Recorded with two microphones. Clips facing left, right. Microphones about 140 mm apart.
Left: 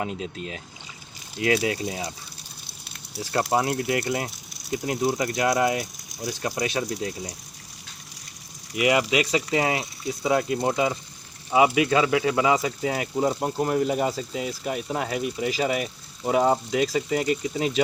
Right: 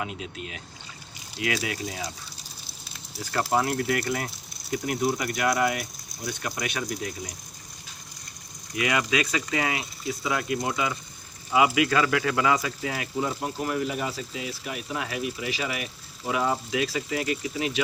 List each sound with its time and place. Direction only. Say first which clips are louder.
0.0 s speech: left 4 dB; 35° left (ahead or behind)
3.5 s speech: even; 25° left (ahead or behind)
8.7 s speech: left 4 dB; 25° left (ahead or behind)